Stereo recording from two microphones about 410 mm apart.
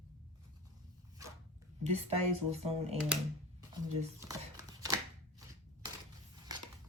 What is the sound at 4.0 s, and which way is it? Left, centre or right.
Shuffling cards, centre.